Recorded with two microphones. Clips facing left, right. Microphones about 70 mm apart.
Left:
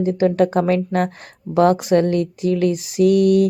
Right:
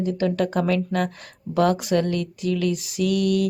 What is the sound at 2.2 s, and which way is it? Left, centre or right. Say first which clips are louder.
A woman's voice: left 6 dB; left.